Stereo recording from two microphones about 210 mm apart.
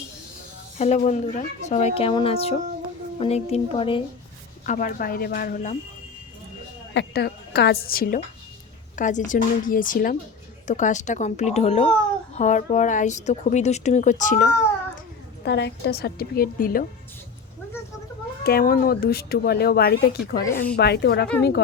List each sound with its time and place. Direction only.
0.8 s a woman's voice: 35° left (ahead or behind)
4.6 s speech: 40° left (ahead or behind)
6.9 s a woman's voice: 50° left (ahead or behind)
15.4 s speech: 55° left (ahead or behind)
18.4 s speech: 45° left (ahead or behind)